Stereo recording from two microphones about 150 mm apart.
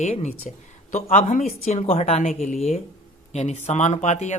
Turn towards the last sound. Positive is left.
turn(degrees=50)  # may be behind; listen again after turning